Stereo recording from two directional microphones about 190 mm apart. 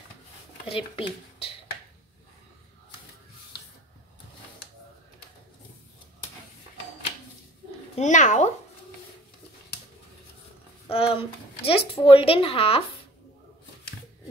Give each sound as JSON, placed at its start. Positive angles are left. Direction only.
{"t": 0.7, "sound": "a woman's voice", "side_deg": 30}
{"t": 7.9, "sound": "a child's voice", "side_deg": 40}
{"t": 10.9, "sound": "a woman's voice", "side_deg": 30}